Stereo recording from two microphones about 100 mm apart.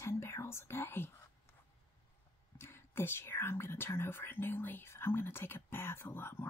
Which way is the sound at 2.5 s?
25° left (ahead or behind).